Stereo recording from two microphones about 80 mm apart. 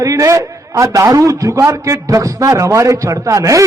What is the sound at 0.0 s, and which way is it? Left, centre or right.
A man's voice, right.